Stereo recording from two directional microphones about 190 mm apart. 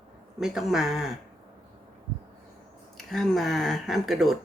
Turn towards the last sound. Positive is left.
turn(degrees=0)  # may be behind; listen again after turning